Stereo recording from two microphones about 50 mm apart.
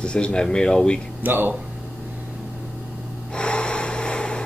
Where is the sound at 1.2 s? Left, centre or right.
Right.